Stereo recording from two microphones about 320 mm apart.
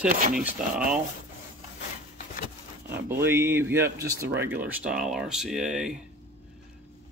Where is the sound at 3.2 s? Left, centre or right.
Centre.